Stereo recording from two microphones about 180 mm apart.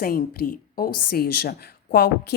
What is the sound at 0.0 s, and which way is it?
A woman's voice, 55° left (ahead or behind).